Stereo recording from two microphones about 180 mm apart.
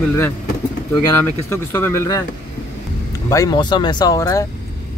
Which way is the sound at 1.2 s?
15° left (ahead or behind).